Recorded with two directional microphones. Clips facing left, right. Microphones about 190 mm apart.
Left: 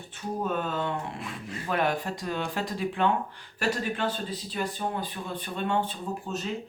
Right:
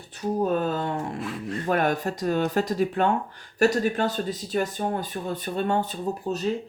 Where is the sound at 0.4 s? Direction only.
40° right (ahead or behind).